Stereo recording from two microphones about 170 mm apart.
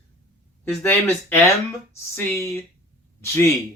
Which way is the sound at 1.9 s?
15° left (ahead or behind).